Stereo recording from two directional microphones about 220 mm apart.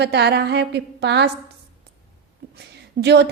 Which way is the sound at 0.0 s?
50° right (ahead or behind).